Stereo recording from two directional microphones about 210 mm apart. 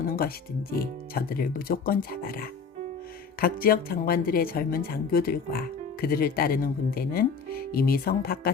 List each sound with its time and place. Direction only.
0.0 s a woman's voice: 45° left (ahead or behind)